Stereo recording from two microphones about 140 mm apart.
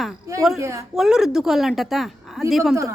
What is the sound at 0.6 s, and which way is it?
Speech, 20° right (ahead or behind).